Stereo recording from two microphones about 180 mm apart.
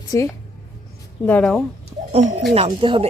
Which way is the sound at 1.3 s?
5° left (ahead or behind).